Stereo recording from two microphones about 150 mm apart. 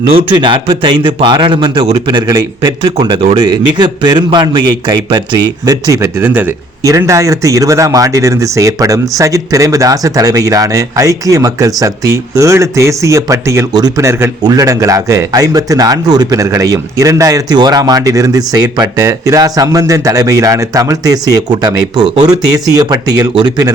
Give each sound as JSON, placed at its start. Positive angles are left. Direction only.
{"t": 0.1, "sound": "a man's voice", "side_deg": -35}